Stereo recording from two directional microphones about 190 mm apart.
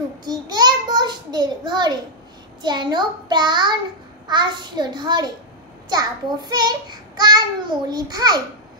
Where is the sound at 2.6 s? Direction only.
25° right (ahead or behind).